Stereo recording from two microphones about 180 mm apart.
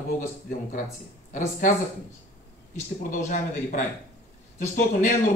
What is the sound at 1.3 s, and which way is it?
Speech, 45° left (ahead or behind).